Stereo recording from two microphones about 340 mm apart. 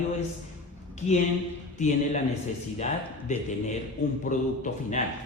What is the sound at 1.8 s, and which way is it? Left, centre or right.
Speech, left.